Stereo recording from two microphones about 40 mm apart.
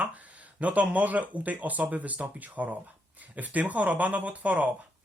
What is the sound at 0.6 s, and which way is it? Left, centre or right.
Speech, right.